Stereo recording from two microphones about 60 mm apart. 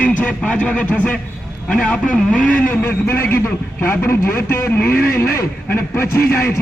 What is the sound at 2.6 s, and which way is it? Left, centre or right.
Speech, left.